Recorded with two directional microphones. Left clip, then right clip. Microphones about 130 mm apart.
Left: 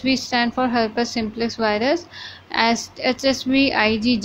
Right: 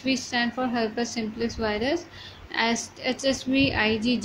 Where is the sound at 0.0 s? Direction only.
25° left (ahead or behind).